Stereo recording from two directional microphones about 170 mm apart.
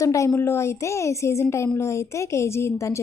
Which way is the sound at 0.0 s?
20° left (ahead or behind).